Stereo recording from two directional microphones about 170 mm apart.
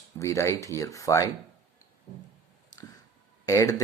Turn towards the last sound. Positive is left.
turn(degrees=20)  # may be behind; listen again after turning